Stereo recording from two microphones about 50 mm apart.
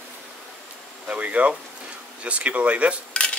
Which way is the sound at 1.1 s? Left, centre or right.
Right.